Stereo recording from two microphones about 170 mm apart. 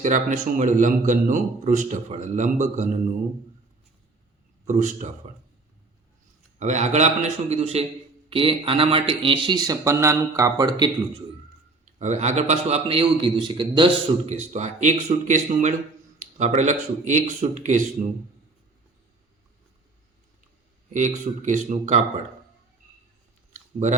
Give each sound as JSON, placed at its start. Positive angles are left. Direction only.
{"t": 0.0, "sound": "a man's voice", "side_deg": -45}
{"t": 4.6, "sound": "a man's voice", "side_deg": -45}
{"t": 6.6, "sound": "a man's voice", "side_deg": -45}
{"t": 11.9, "sound": "a man's voice", "side_deg": -45}
{"t": 14.3, "sound": "a man's voice", "side_deg": -40}
{"t": 20.9, "sound": "a man's voice", "side_deg": -45}